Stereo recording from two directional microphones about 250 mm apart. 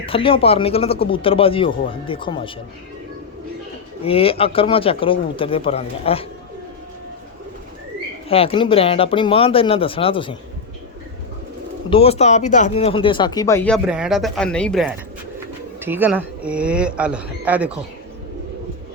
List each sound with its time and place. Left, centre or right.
0.0 s speech: left
4.0 s speech: left
8.3 s speech: left
11.9 s speech: left; by 17.7 s centre